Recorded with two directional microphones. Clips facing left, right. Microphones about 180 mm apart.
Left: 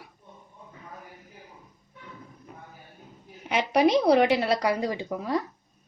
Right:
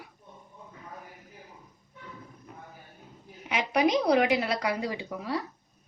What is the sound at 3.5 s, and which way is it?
A woman's voice, 35° left (ahead or behind).